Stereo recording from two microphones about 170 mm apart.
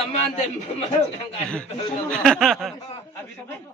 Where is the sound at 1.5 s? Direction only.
5° left (ahead or behind).